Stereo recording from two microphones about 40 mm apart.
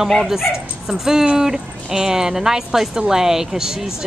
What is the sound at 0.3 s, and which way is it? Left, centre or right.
A woman's voice, centre.